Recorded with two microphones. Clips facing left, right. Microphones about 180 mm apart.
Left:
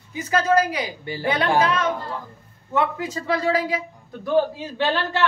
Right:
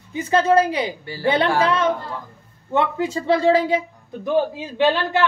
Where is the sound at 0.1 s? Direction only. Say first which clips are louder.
Right 3 dB; 30° right (ahead or behind).